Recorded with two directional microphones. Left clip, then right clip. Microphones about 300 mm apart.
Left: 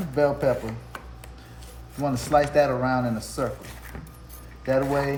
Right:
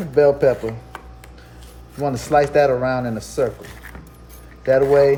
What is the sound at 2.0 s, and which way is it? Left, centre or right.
Speech, right.